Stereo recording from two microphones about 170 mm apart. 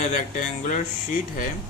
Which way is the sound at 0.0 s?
50° left (ahead or behind).